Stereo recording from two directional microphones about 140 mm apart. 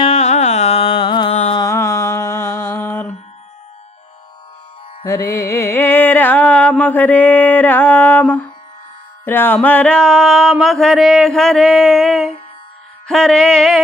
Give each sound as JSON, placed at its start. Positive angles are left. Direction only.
{"t": 0.0, "sound": "music", "side_deg": 50}
{"t": 1.5, "sound": "music", "side_deg": 20}
{"t": 5.0, "sound": "mantra", "side_deg": 20}
{"t": 9.2, "sound": "music", "side_deg": 15}